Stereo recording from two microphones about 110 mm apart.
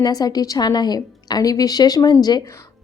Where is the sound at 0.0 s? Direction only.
35° left (ahead or behind).